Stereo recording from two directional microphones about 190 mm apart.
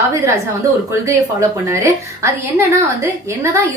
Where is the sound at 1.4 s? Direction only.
15° right (ahead or behind).